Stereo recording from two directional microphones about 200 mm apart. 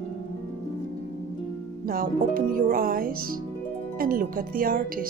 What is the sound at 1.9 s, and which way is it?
Speech, 45° right (ahead or behind).